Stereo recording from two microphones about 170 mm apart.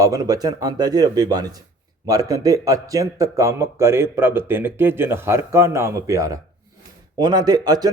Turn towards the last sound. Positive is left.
turn(degrees=-25)  # may be behind; listen again after turning